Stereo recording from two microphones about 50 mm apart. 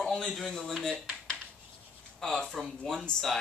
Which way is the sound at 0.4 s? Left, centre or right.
Centre.